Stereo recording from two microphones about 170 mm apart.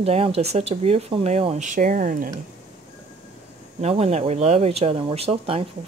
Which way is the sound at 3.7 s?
35° right (ahead or behind).